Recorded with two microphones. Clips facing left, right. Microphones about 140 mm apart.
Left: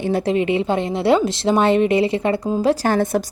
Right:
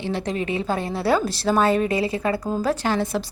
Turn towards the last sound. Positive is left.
turn(degrees=50)  # may be behind; listen again after turning